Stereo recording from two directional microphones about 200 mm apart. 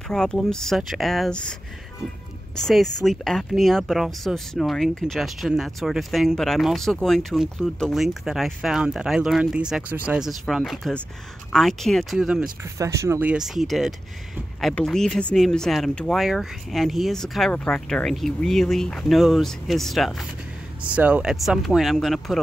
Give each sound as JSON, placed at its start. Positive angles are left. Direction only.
{"t": 0.1, "sound": "speech", "side_deg": 5}
{"t": 2.5, "sound": "speech", "side_deg": 0}
{"t": 12.7, "sound": "speech", "side_deg": -15}